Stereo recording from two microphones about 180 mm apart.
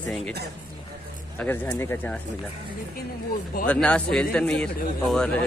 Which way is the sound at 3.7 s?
5° left (ahead or behind).